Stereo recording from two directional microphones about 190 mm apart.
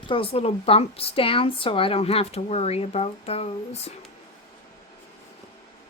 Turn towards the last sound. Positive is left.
turn(degrees=35)  # may be behind; listen again after turning